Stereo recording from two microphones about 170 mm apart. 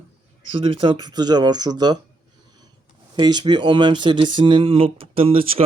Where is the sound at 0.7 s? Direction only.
30° right (ahead or behind).